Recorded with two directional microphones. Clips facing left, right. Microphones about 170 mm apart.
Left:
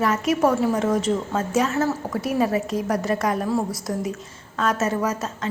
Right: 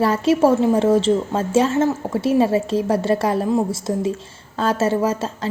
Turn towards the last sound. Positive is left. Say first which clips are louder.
# right 4 dB
turn(degrees=-30)  # may be behind; listen again after turning